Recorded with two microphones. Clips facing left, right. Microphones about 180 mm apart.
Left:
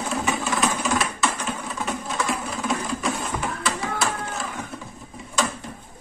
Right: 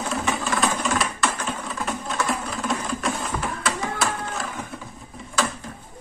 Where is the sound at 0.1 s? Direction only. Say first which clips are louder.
Left 1 dB; centre (ahead or behind).